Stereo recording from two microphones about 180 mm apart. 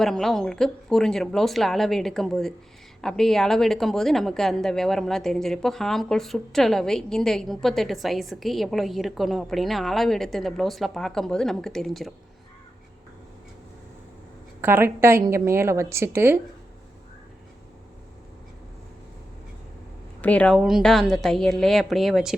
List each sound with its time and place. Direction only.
0.0 s a woman's voice: centre (ahead or behind)
14.6 s a woman's voice: 10° right (ahead or behind)
20.2 s a woman's voice: 5° left (ahead or behind)